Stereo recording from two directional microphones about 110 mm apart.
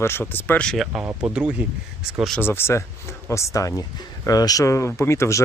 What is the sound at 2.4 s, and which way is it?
Speech, 20° left (ahead or behind).